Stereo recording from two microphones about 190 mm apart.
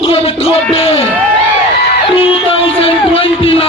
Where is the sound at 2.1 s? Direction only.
30° left (ahead or behind).